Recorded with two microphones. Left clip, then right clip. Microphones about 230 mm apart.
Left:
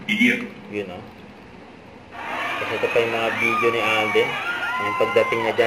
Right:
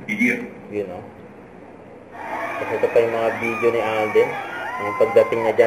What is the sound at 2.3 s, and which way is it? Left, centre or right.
A man's voice, left.